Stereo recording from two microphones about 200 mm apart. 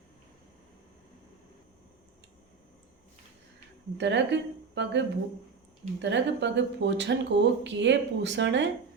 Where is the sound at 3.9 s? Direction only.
60° right (ahead or behind).